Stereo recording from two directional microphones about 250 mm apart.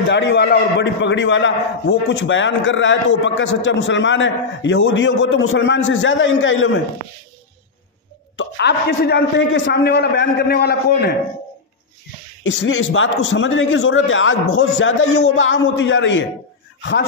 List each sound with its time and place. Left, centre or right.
0.1 s a man's voice: left
8.4 s a man's voice: left
12.4 s a man's voice: left